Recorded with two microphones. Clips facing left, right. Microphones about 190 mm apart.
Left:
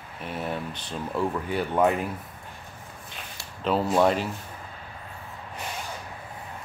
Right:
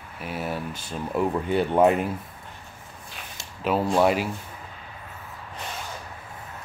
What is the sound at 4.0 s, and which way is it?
Speech, 10° right (ahead or behind).